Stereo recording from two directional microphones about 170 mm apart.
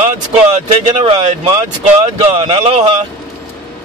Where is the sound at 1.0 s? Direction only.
25° right (ahead or behind).